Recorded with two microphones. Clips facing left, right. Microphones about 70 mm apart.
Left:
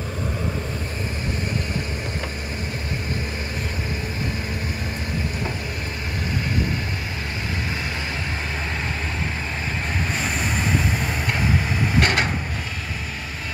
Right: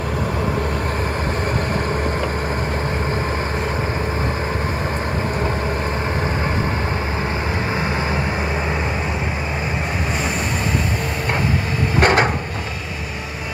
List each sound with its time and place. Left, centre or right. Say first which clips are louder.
12.0 s wood: right 7 dB; right